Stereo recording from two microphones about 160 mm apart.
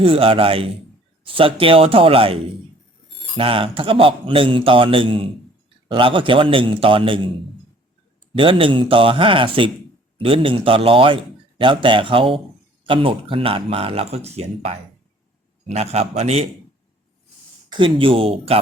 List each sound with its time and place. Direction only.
0.0 s a man's voice: 35° right (ahead or behind)
8.3 s a man's voice: 35° right (ahead or behind)
17.7 s a man's voice: 30° right (ahead or behind)